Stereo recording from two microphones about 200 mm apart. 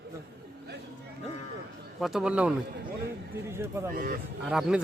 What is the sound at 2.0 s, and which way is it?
Speech, 5° right (ahead or behind).